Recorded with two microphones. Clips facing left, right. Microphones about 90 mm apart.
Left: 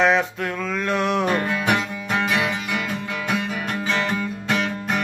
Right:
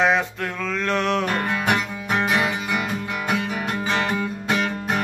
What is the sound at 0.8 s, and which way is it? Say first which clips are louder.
Music: left 1 dB; 15° left (ahead or behind).